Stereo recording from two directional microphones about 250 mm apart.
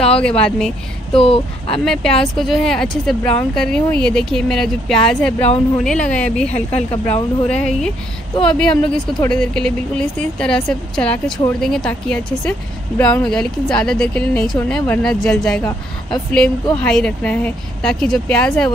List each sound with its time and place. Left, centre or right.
0.2 s speech: centre
1.2 s speech: left
1.9 s speech: centre
16.7 s speech: centre